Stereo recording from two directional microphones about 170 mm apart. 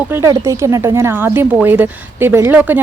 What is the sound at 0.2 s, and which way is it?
A woman's voice, 20° right (ahead or behind).